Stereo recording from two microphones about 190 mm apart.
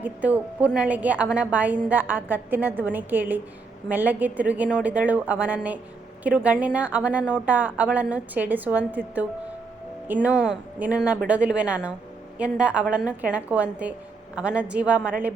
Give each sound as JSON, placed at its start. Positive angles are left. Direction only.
{"t": 0.0, "sound": "a woman's voice", "side_deg": -10}